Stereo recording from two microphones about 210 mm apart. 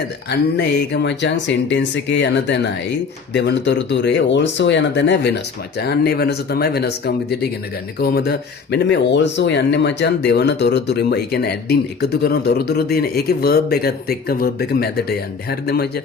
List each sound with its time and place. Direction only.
0.3 s speech: 55° left (ahead or behind)